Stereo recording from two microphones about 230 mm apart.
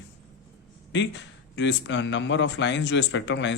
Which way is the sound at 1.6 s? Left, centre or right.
Left.